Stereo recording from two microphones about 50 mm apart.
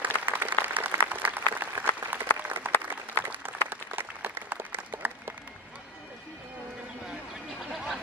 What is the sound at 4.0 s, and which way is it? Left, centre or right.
Applause, right.